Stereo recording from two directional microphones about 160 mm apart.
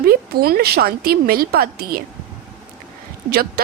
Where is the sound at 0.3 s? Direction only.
75° right (ahead or behind).